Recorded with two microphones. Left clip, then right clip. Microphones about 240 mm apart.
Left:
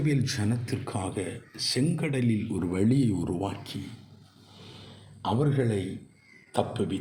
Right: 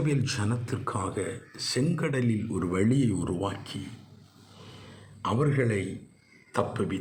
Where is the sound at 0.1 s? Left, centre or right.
Centre.